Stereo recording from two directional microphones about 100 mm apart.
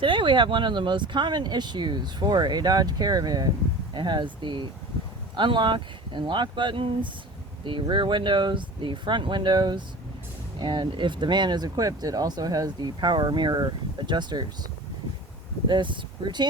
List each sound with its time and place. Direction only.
0.0 s speech: 55° right (ahead or behind)
15.6 s speech: 50° right (ahead or behind)